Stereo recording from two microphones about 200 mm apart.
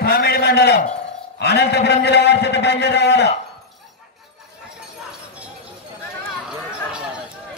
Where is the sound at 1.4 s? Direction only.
55° left (ahead or behind).